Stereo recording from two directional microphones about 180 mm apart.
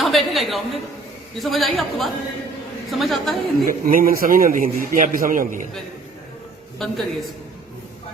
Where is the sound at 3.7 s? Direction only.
50° right (ahead or behind).